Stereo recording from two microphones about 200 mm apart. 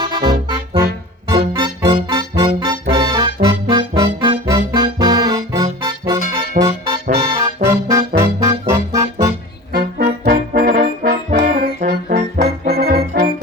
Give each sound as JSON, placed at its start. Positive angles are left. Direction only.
{"t": 0.0, "sound": "music", "side_deg": -25}
{"t": 9.7, "sound": "trombone", "side_deg": -45}